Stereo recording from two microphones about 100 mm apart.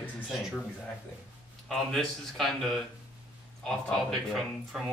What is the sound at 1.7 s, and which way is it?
Speech, 5° left (ahead or behind).